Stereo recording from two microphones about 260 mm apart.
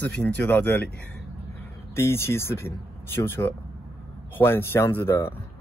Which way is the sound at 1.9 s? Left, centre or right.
Centre.